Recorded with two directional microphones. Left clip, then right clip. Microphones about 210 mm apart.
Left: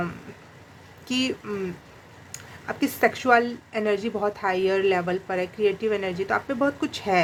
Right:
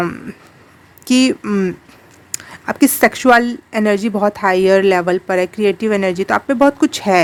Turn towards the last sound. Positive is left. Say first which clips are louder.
# right 11 dB
turn(degrees=-55)  # may be behind; listen again after turning